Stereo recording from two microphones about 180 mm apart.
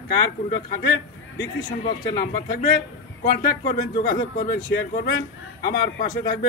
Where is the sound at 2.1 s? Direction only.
55° left (ahead or behind).